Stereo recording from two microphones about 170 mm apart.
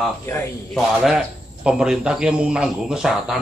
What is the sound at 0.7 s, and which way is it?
A man's voice, 5° right (ahead or behind).